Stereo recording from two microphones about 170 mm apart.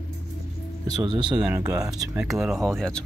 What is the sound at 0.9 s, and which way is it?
Speech, 25° right (ahead or behind).